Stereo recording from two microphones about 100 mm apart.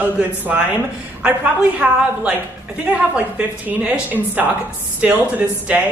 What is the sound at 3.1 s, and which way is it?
A woman's voice, 15° right (ahead or behind).